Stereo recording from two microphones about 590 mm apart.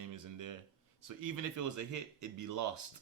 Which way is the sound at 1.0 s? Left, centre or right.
Right.